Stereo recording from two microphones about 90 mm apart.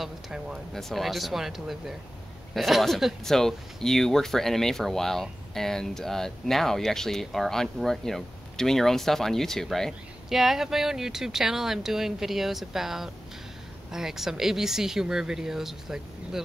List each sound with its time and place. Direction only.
0.0 s speech: 5° right (ahead or behind)